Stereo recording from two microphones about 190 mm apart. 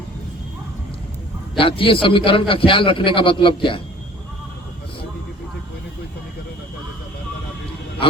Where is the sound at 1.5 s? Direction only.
30° left (ahead or behind).